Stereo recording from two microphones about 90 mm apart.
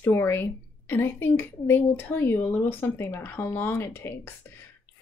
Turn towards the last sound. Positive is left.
turn(degrees=25)  # may be behind; listen again after turning